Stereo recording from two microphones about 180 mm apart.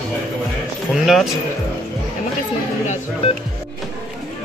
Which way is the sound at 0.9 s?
Centre (ahead or behind).